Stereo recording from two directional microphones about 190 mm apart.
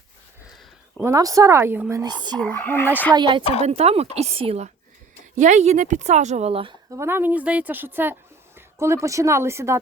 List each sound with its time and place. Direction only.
0.9 s speech: 15° right (ahead or behind)
2.4 s speech: 10° left (ahead or behind)
3.2 s a woman's voice: 25° right (ahead or behind)
6.9 s speech: 15° right (ahead or behind)